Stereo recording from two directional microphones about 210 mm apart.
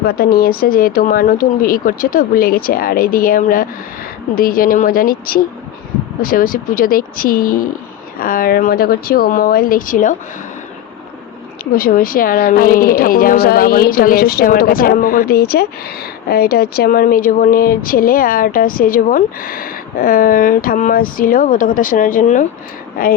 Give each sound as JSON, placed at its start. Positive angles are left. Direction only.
{"t": 0.0, "sound": "a woman's voice", "side_deg": 45}
{"t": 11.6, "sound": "a woman's voice", "side_deg": 45}